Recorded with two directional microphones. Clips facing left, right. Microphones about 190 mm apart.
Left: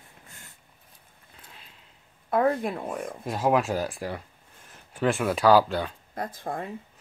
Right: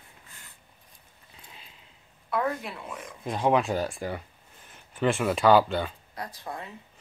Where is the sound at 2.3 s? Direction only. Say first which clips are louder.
Left 6 dB; 40° left (ahead or behind).